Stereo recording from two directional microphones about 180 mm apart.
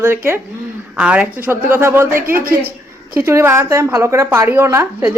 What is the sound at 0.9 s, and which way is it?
A woman's voice, 5° right (ahead or behind).